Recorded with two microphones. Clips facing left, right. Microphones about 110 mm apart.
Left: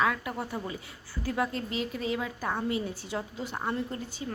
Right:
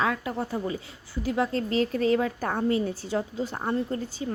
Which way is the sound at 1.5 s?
40° right (ahead or behind).